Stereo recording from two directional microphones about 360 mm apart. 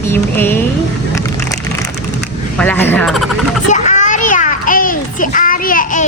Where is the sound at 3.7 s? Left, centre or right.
Centre.